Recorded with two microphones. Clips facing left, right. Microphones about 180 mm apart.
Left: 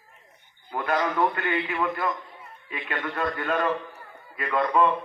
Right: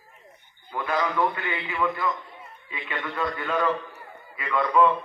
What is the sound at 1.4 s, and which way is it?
A man's voice, 55° left (ahead or behind).